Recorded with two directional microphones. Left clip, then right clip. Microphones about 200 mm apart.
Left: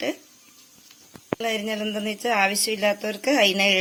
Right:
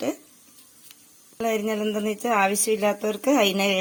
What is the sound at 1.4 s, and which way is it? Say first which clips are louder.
A woman's voice: right 3 dB; 50° right (ahead or behind).